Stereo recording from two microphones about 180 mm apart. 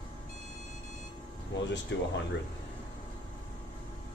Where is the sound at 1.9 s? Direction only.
90° left.